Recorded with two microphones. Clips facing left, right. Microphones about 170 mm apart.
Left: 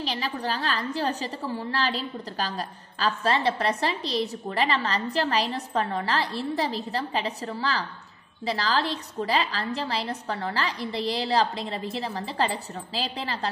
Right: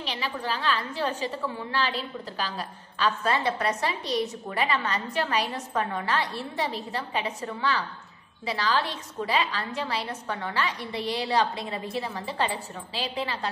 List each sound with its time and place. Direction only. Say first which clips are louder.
0.0 s a woman's voice: left 2 dB; 40° left (ahead or behind)
9.2 s a woman's voice: left 1 dB; 35° left (ahead or behind)